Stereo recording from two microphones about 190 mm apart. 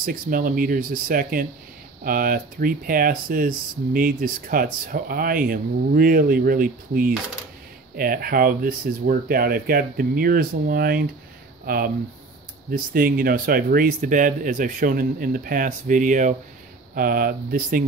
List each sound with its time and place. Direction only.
0.0 s speech: 50° right (ahead or behind)